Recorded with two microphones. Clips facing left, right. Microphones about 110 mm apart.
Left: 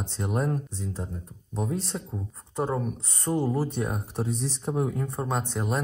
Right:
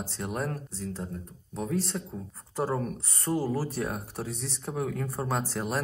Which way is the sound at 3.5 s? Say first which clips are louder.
Left 2 dB; 25° left (ahead or behind).